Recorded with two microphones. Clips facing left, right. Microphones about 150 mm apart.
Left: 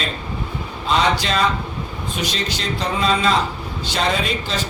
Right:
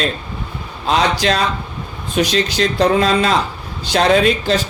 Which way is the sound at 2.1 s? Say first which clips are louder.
Right 10 dB; 70° right (ahead or behind).